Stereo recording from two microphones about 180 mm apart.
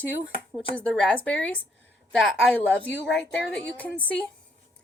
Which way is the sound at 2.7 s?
10° left (ahead or behind).